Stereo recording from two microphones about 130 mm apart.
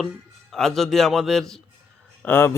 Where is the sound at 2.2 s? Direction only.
15° left (ahead or behind).